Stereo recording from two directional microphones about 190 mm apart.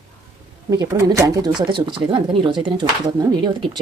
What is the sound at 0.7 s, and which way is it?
Speech, 20° right (ahead or behind).